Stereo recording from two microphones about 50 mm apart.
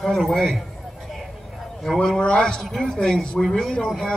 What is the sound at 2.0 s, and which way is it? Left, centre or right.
A man's voice, centre.